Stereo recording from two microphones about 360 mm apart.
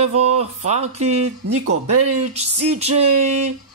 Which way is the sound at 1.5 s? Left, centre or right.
Right.